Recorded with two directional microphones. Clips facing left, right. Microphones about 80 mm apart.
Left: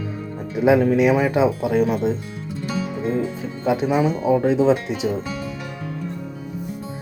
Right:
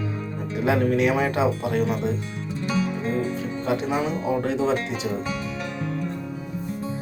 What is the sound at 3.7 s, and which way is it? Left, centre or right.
Speech, centre.